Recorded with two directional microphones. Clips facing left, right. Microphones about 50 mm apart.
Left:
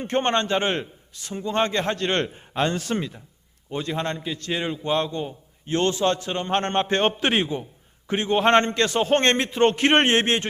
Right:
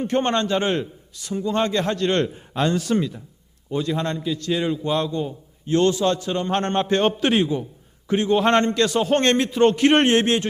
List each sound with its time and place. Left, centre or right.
0.0 s a man's voice: left